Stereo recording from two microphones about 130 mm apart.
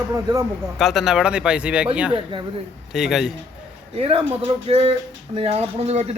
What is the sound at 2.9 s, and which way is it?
Speech, 5° right (ahead or behind).